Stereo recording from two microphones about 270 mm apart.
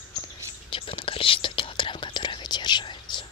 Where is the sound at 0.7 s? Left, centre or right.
Centre.